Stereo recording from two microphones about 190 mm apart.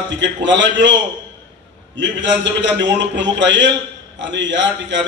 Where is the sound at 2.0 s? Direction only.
70° right (ahead or behind).